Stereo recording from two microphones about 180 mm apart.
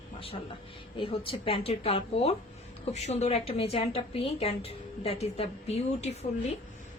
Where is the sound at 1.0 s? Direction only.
30° left (ahead or behind).